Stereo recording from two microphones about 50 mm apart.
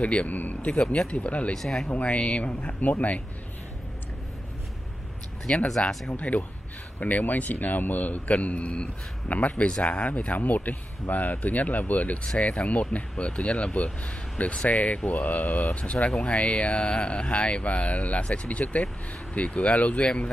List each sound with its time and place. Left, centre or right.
0.0 s speech: left
1.5 s speech: centre
1.9 s speech: left
5.5 s speech: left